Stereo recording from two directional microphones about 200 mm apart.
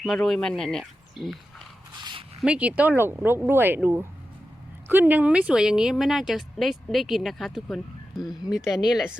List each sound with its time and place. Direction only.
0.0 s a woman's voice: centre (ahead or behind)
2.4 s a woman's voice: 5° right (ahead or behind)